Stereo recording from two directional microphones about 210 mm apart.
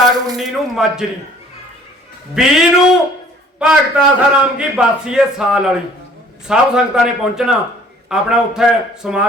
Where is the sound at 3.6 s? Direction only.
Centre (ahead or behind).